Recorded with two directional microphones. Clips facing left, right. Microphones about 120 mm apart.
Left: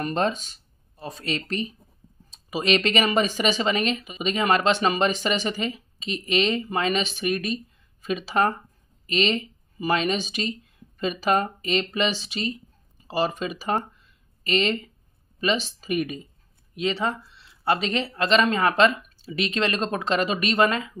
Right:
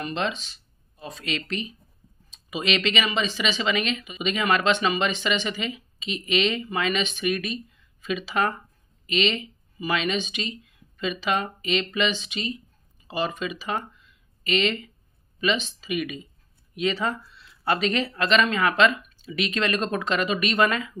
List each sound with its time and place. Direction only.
0.0 s speech: 45° left (ahead or behind)
16.7 s speech: 25° left (ahead or behind)